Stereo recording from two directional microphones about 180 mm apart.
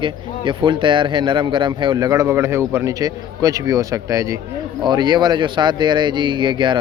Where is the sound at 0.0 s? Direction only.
25° right (ahead or behind).